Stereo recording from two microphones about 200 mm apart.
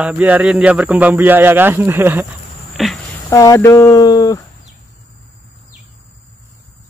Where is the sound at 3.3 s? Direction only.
15° left (ahead or behind).